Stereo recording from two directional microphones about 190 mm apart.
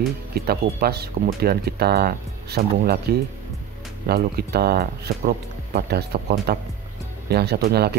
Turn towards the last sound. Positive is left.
turn(degrees=-55)  # may be behind; listen again after turning